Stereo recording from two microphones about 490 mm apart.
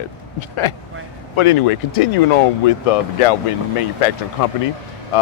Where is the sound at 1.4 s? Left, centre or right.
Left.